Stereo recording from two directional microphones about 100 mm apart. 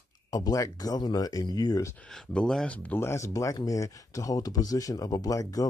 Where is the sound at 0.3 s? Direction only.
40° left (ahead or behind).